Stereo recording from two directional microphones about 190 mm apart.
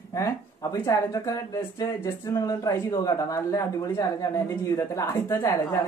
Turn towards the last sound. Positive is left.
turn(degrees=15)  # may be behind; listen again after turning